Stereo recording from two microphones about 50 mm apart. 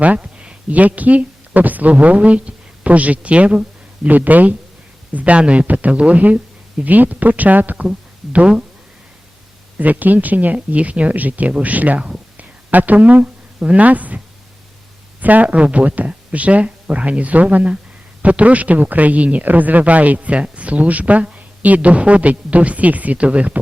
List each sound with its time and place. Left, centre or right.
0.0 s a sound: right
0.7 s a woman's voice: right
7.9 s speech: right
9.7 s a man's voice: right
15.2 s a man's voice: right